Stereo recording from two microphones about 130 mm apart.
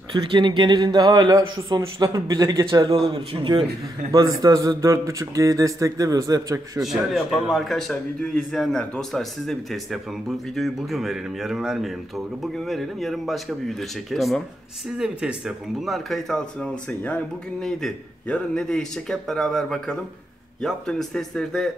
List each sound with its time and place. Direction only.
0.1 s speech: 40° right (ahead or behind)
1.7 s a man's voice: 25° right (ahead or behind)
6.8 s speech: centre (ahead or behind)